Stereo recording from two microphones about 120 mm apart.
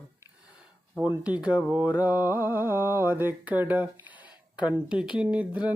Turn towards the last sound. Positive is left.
turn(degrees=-10)  # may be behind; listen again after turning